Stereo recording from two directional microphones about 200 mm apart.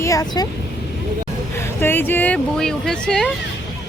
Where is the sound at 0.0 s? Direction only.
15° left (ahead or behind).